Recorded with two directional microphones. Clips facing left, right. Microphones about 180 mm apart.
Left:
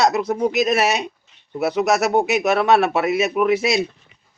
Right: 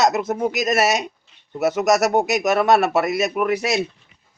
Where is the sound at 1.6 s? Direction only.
40° right (ahead or behind).